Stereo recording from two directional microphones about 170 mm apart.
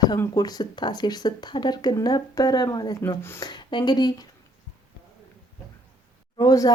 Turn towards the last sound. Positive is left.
turn(degrees=20)  # may be behind; listen again after turning